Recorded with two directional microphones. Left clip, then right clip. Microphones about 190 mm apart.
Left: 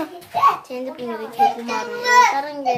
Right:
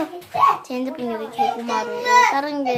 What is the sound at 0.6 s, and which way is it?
Speech, 30° right (ahead or behind).